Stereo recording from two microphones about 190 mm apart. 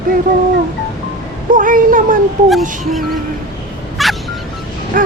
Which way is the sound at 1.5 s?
45° right (ahead or behind).